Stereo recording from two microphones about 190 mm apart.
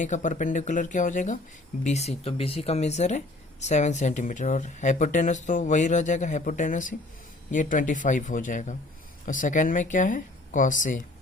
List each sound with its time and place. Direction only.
0.0 s speech: 40° left (ahead or behind)